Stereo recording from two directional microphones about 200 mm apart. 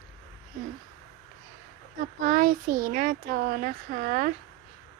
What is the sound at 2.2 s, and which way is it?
Speech, 45° right (ahead or behind).